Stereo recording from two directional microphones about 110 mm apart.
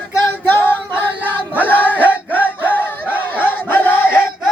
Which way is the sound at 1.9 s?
15° left (ahead or behind).